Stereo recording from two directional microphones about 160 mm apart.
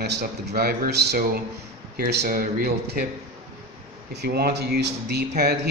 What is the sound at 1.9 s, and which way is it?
Speech, 80° right.